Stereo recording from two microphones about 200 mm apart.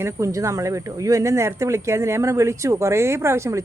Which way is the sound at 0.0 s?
15° right (ahead or behind).